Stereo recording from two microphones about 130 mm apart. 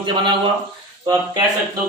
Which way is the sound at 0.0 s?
40° right (ahead or behind).